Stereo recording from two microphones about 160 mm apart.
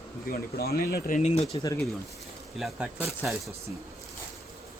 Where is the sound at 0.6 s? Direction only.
70° left (ahead or behind).